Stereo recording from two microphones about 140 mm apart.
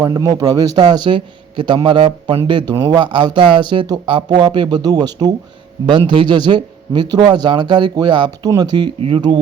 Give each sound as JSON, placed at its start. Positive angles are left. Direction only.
{"t": 0.0, "sound": "a man's voice", "side_deg": -25}
{"t": 9.0, "sound": "a man's voice", "side_deg": -40}